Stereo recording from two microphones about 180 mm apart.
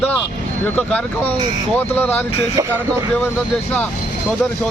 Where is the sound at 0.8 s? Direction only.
5° left (ahead or behind).